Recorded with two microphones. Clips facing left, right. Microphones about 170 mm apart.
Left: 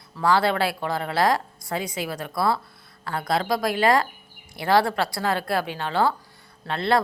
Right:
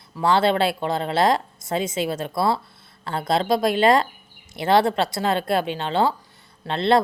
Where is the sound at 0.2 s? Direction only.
25° right (ahead or behind).